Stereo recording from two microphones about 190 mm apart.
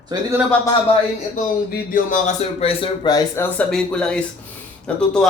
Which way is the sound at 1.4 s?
45° left (ahead or behind).